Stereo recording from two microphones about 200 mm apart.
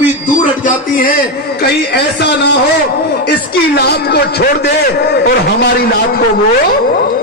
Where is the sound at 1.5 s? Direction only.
55° left (ahead or behind).